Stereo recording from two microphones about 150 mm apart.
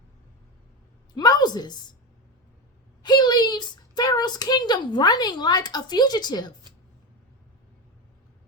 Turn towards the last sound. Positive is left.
turn(degrees=30)  # may be behind; listen again after turning